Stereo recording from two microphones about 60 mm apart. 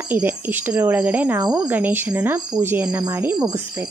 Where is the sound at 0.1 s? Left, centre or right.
Right.